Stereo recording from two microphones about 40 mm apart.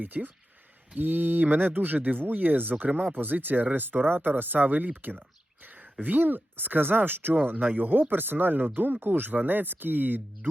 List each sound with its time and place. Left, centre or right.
0.0 s speech: right
5.6 s a sound: right
6.0 s speech: right